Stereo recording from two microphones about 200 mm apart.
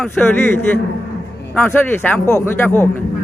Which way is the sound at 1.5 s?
10° left (ahead or behind).